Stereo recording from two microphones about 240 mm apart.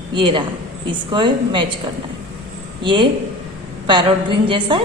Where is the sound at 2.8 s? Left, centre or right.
Centre.